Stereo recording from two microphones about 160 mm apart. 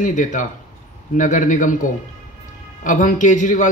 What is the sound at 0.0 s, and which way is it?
Speech, 50° left (ahead or behind).